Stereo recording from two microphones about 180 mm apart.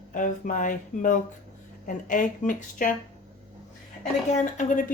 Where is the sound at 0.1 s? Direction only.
45° left (ahead or behind).